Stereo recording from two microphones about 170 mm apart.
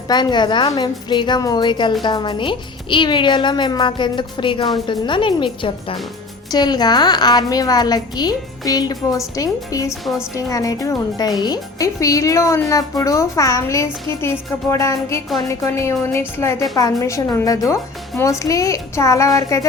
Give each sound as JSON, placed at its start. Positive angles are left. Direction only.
{"t": 0.1, "sound": "a child's voice", "side_deg": 25}